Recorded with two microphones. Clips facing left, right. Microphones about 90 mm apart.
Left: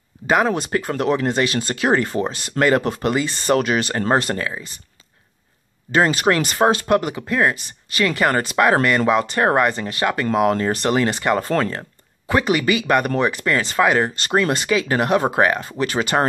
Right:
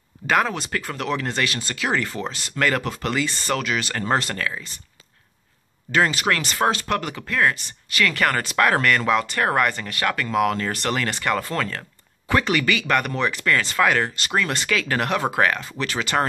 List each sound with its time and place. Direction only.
0.3 s speech: 20° left (ahead or behind)
1.7 s speech: 35° left (ahead or behind)
3.5 s speech: 35° left (ahead or behind)
4.1 s speech: 25° left (ahead or behind)
6.1 s speech: 30° left (ahead or behind)